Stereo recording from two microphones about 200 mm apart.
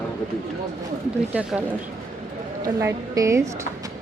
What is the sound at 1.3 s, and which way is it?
Speech, 5° right (ahead or behind).